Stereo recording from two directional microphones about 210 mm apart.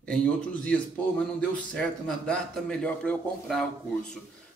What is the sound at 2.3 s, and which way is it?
Speech, 5° left (ahead or behind).